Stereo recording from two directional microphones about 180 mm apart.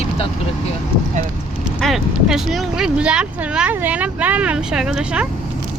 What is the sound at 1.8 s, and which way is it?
Speech, centre (ahead or behind).